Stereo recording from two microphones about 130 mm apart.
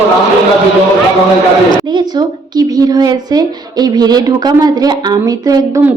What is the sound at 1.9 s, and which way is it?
A woman's voice, 35° right (ahead or behind).